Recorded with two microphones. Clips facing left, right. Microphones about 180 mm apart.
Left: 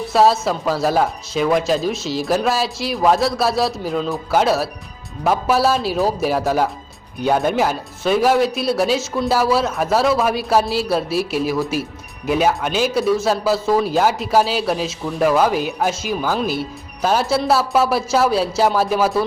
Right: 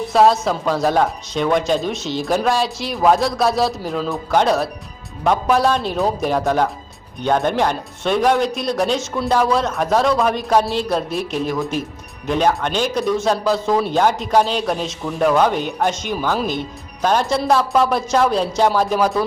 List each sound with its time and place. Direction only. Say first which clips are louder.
0.1 s speech: right 1 dB; centre (ahead or behind)